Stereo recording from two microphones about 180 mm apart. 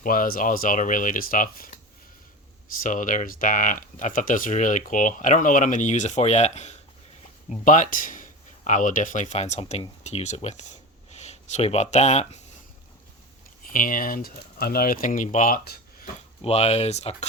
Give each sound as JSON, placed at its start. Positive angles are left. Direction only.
{"t": 0.0, "sound": "speech", "side_deg": 50}
{"t": 2.8, "sound": "speech", "side_deg": 45}
{"t": 13.7, "sound": "speech", "side_deg": 50}
{"t": 16.4, "sound": "speech", "side_deg": 35}